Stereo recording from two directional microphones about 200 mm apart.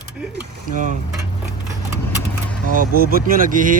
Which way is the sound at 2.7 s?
45° right (ahead or behind).